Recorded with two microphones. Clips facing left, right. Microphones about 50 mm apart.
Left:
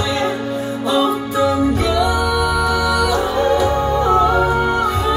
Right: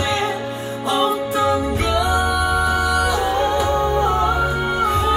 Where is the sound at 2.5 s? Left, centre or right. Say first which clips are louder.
Left 1 dB; left.